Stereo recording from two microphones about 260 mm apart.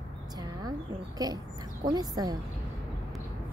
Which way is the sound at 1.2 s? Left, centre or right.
Centre.